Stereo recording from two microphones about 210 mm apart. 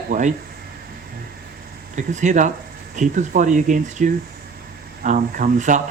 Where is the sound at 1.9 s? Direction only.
35° right (ahead or behind).